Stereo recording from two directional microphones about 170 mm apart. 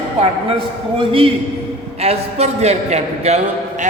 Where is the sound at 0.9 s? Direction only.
30° right (ahead or behind).